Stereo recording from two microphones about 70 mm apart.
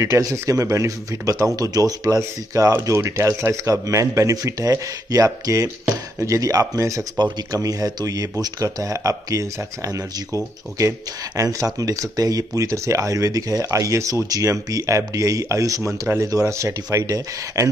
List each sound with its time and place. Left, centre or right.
0.0 s speech: right